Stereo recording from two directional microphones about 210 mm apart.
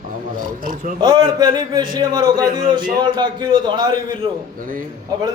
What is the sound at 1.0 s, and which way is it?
A man's voice, 20° right (ahead or behind).